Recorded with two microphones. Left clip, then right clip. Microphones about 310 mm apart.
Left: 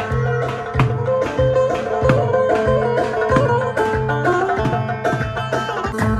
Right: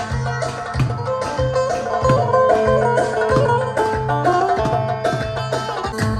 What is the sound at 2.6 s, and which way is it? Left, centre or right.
Music, right.